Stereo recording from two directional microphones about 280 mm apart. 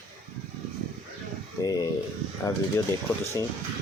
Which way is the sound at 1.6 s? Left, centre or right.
Centre.